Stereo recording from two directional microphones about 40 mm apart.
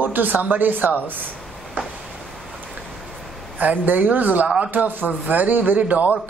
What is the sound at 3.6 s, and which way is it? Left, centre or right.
Speech, right.